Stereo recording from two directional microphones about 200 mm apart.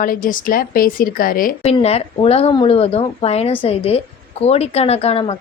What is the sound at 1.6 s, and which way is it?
A woman's voice, 30° left (ahead or behind).